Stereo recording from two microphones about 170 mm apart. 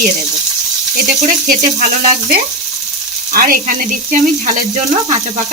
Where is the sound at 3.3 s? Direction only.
60° right (ahead or behind).